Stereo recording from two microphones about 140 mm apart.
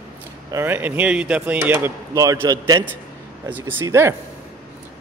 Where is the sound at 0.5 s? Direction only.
15° right (ahead or behind).